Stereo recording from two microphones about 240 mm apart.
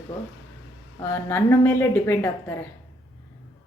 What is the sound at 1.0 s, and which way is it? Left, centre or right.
A woman's voice, centre.